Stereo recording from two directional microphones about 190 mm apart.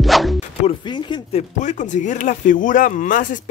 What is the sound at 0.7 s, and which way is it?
Speech, 25° left (ahead or behind).